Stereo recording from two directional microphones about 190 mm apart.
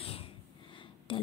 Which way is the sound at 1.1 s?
25° left (ahead or behind).